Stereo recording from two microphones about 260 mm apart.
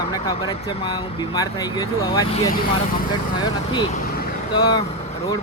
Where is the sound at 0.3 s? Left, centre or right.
Centre.